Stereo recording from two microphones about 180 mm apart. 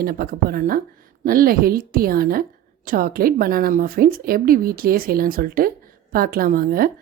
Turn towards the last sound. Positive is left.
turn(degrees=-55)  # may be behind; listen again after turning